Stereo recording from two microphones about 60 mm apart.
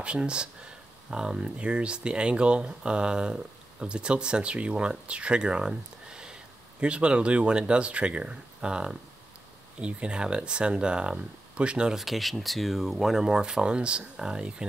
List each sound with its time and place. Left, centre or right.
0.0 s speech: centre
12.0 s speech: centre